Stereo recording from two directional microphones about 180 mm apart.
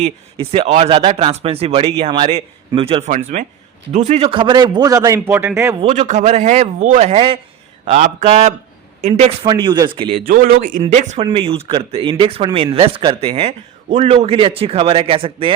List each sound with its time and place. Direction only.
0.0 s speech: 35° right (ahead or behind)
3.1 s a man's voice: 45° right (ahead or behind); by 5.7 s 15° right (ahead or behind)
5.9 s speech: 40° right (ahead or behind)
9.5 s a man's voice: 25° right (ahead or behind)
10.2 s speech: 50° right (ahead or behind)
11.3 s speech: 30° right (ahead or behind)